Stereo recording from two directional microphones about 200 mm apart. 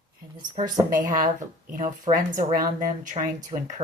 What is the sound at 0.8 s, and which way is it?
Speech, 45° right (ahead or behind).